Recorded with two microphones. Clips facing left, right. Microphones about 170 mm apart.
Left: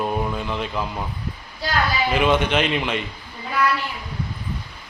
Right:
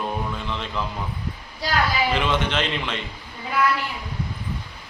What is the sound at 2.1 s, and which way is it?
Speech, 10° left (ahead or behind).